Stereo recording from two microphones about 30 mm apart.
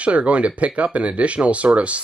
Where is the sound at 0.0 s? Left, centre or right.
Right.